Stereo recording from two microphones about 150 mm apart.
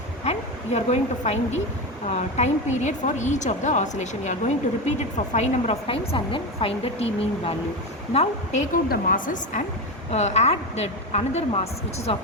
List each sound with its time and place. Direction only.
0.3 s speech: 50° left (ahead or behind)
8.7 s a woman's voice: 65° left (ahead or behind)
10.1 s speech: 45° left (ahead or behind)